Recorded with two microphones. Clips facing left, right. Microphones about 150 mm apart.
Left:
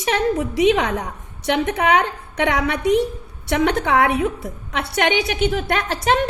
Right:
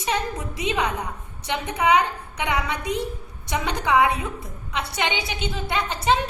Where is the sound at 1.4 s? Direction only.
70° left (ahead or behind).